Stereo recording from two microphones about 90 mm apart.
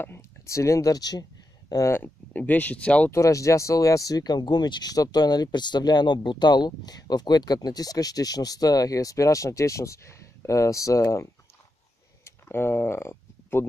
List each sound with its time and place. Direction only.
0.0 s speech: 30° left (ahead or behind); by 1.2 s 45° left (ahead or behind)
1.9 s speech: 20° left (ahead or behind)
3.1 s speech: 35° left (ahead or behind)
12.3 s a sound: 25° left (ahead or behind)